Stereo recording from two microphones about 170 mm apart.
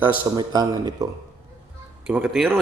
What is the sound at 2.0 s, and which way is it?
Speech, 5° right (ahead or behind).